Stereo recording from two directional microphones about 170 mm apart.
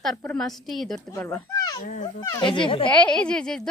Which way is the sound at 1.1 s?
15° left (ahead or behind).